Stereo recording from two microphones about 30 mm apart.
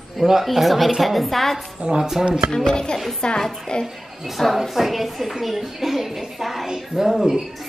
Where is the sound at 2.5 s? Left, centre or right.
Left.